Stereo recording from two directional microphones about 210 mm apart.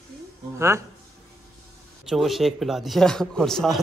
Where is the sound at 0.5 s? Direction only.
15° right (ahead or behind).